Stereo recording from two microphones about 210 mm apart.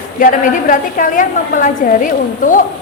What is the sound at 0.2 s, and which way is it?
A woman's voice, 40° left (ahead or behind).